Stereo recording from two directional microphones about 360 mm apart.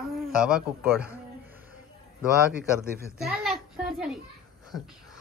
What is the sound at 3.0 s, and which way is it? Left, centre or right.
Speech, centre.